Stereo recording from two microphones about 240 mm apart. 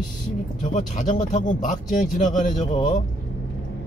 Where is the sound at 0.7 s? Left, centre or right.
Left.